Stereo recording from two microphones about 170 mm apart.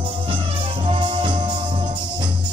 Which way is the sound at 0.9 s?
30° right (ahead or behind).